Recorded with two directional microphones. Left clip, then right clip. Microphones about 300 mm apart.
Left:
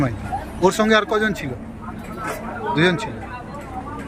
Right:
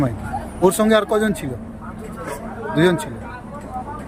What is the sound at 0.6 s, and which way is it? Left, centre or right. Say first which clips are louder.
Speech: right 1 dB; centre.